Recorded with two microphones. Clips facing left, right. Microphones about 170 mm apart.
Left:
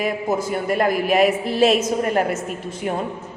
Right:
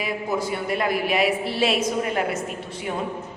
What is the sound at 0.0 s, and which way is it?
A woman's voice, 45° left (ahead or behind).